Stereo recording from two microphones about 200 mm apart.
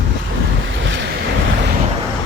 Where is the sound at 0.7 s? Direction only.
65° right (ahead or behind).